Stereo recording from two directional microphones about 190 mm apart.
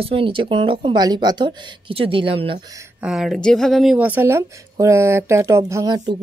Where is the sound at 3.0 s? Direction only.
5° right (ahead or behind); by 6.2 s 20° right (ahead or behind).